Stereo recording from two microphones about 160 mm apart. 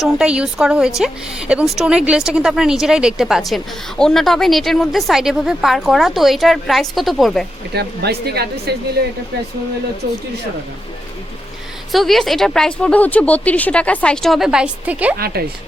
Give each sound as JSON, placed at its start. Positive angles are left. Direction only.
{"t": 0.0, "sound": "speech", "side_deg": -5}
{"t": 7.7, "sound": "speech", "side_deg": -90}
{"t": 11.9, "sound": "speech", "side_deg": 0}
{"t": 15.2, "sound": "speech", "side_deg": -75}